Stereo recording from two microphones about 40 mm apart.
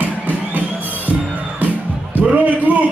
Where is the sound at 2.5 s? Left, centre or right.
Right.